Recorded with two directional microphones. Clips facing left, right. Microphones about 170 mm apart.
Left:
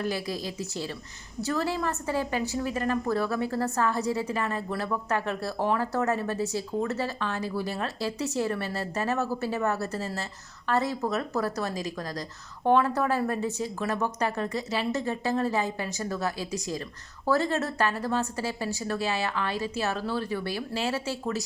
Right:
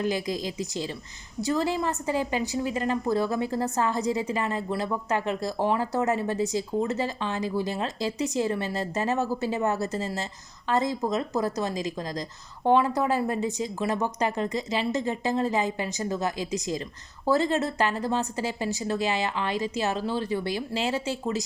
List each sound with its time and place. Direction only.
0.0 s a woman's voice: 20° right (ahead or behind)